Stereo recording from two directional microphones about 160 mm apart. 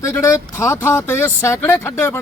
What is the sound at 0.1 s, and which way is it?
Speech, 20° left (ahead or behind).